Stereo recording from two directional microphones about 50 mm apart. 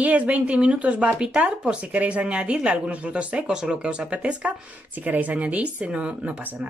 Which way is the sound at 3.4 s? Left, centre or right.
Centre.